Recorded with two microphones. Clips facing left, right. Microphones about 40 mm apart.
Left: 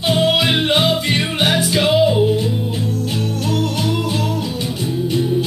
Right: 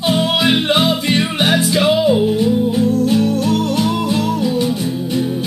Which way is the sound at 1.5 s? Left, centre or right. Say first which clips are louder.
Right 2 dB; left.